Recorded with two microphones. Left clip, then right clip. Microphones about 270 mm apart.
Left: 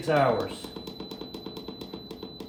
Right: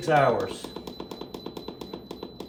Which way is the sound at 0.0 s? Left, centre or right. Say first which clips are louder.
Right 2 dB; centre.